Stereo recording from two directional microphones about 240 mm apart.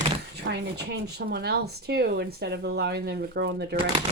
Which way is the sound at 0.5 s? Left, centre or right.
Right.